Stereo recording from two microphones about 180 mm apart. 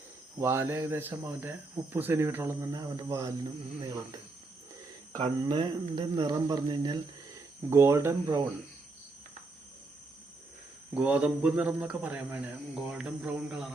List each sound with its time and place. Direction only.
0.3 s speech: 15° right (ahead or behind)
5.2 s speech: 25° right (ahead or behind)
10.9 s speech: 5° right (ahead or behind)